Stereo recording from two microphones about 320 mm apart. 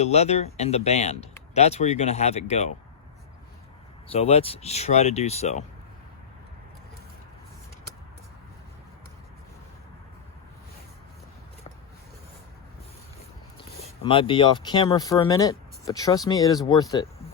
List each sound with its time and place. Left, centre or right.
0.0 s speech: centre
4.1 s speech: centre
14.0 s speech: centre